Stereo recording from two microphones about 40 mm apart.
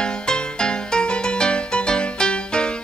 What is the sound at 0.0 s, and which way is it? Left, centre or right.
Music, left.